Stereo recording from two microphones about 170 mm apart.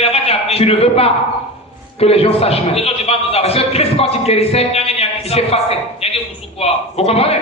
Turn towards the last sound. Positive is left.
turn(degrees=35)  # may be behind; listen again after turning